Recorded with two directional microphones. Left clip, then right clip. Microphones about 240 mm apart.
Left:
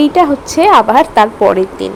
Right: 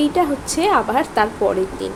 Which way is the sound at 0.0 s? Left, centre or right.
Centre.